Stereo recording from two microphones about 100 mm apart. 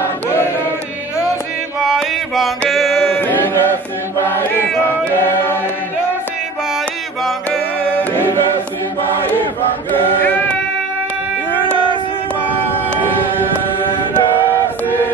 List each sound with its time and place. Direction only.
1.9 s male singing: centre (ahead or behind)
2.7 s mantra: centre (ahead or behind)
3.2 s a sound: 20° left (ahead or behind)
4.2 s choir: 25° left (ahead or behind)
4.8 s chant: 20° left (ahead or behind)
11.6 s a sound: 55° right (ahead or behind)